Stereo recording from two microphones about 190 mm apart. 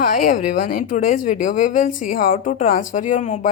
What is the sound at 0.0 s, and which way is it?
Speech, 45° left (ahead or behind).